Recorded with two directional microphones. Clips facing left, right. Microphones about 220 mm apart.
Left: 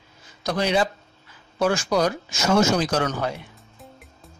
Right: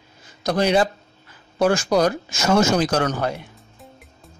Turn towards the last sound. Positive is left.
turn(degrees=0)  # may be behind; listen again after turning